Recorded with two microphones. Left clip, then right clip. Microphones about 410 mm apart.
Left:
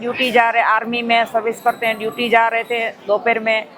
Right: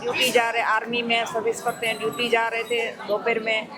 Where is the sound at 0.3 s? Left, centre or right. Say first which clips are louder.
Left 9 dB; left.